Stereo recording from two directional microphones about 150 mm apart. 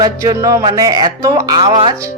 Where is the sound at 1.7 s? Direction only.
40° right (ahead or behind).